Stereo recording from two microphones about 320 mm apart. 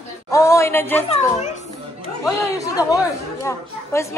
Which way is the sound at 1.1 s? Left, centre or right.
Centre.